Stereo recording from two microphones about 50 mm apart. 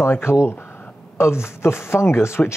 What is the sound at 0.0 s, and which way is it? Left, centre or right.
Speech, left.